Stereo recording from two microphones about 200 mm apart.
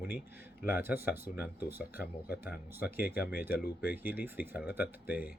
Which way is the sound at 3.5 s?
50° left (ahead or behind).